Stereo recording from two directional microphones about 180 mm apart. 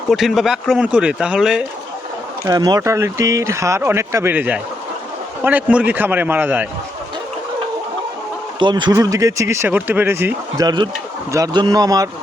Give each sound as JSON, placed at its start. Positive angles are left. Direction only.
{"t": 0.1, "sound": "speech", "side_deg": 0}
{"t": 2.4, "sound": "speech", "side_deg": -20}
{"t": 8.5, "sound": "speech", "side_deg": -25}